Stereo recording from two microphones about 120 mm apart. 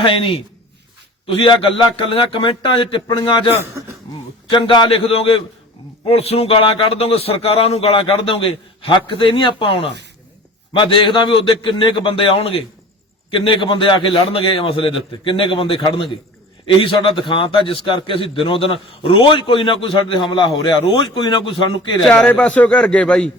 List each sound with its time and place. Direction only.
0.0 s a man's voice: 45° left (ahead or behind)
4.5 s a man's voice: 40° left (ahead or behind)
22.0 s a man's voice: 5° left (ahead or behind)